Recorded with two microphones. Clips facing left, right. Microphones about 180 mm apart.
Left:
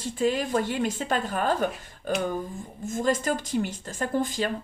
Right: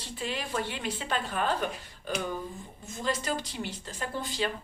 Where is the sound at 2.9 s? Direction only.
45° left (ahead or behind).